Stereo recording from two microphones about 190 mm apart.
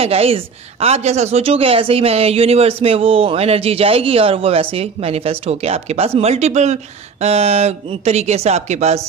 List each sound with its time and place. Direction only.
0.0 s a woman's voice: 30° right (ahead or behind)